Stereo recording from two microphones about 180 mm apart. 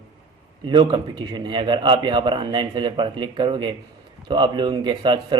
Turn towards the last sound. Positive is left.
turn(degrees=-25)  # may be behind; listen again after turning